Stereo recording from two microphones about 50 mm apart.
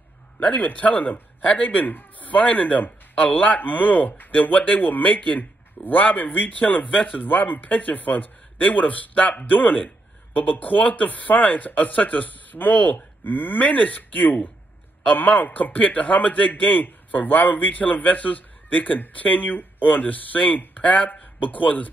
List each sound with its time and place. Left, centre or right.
0.4 s speech: left